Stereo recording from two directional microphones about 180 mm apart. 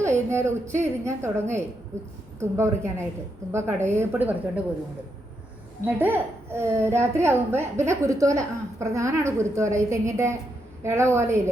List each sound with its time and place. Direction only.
0.0 s a woman's voice: 15° right (ahead or behind)
5.8 s a woman's voice: 10° right (ahead or behind)